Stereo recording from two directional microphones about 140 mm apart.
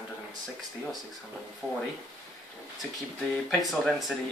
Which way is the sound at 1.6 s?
5° left (ahead or behind).